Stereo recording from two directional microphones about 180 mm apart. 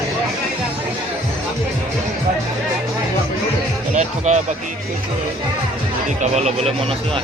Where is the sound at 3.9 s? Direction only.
40° right (ahead or behind).